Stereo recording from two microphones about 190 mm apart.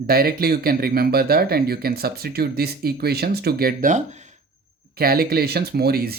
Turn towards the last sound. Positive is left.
turn(degrees=-55)  # may be behind; listen again after turning